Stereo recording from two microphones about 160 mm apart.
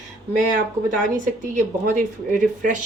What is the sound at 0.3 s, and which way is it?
Speech, 55° right (ahead or behind).